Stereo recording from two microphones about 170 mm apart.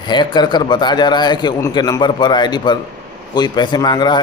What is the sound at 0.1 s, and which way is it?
Speech, 25° left (ahead or behind).